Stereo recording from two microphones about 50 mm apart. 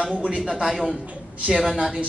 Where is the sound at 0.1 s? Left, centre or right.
Right.